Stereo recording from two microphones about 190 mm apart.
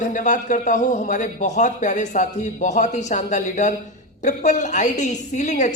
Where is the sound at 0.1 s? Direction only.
40° left (ahead or behind).